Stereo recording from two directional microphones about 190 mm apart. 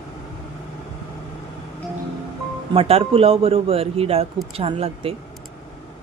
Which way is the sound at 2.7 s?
30° right (ahead or behind).